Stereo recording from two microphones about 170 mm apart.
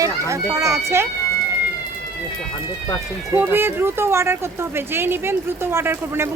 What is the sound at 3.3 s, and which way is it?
Speech, 10° right (ahead or behind).